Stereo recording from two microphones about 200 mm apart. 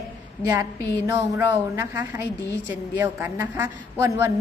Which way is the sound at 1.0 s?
15° right (ahead or behind).